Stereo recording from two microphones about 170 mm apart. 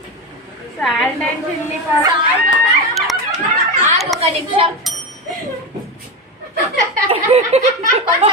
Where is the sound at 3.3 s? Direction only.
45° right (ahead or behind).